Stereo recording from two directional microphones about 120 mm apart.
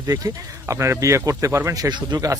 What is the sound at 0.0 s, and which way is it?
Speech, 30° right (ahead or behind).